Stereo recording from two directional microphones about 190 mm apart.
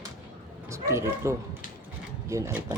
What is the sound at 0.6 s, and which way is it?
Speech, 15° right (ahead or behind).